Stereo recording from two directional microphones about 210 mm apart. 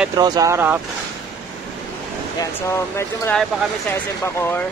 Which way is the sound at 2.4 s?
15° left (ahead or behind).